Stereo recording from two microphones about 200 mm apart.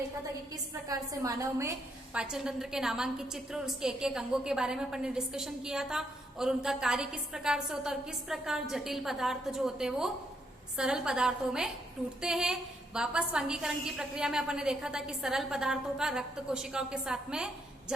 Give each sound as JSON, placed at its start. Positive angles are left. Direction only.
{"t": 0.5, "sound": "a woman's voice", "side_deg": -15}
{"t": 2.1, "sound": "a woman's voice", "side_deg": -5}